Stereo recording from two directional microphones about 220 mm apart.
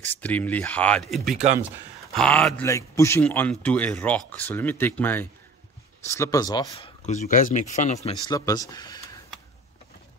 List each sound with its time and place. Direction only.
0.0 s a man's voice: 5° left (ahead or behind)
7.0 s speech: 35° left (ahead or behind); by 9.2 s 15° left (ahead or behind)